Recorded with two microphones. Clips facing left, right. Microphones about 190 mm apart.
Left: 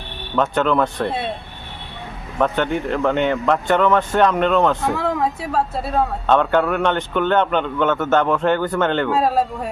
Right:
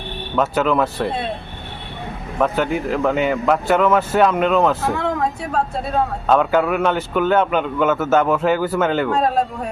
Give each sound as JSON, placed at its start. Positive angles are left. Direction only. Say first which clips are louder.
{"t": 0.3, "sound": "speech", "louder": "even", "side_deg": -5}
{"t": 2.4, "sound": "speech", "louder": "even", "side_deg": -5}